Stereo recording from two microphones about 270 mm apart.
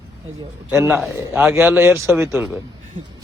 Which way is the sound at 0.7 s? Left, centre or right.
Centre.